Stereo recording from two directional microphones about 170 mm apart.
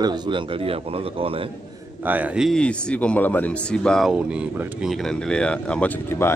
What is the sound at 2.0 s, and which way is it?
A man's voice, 10° right (ahead or behind).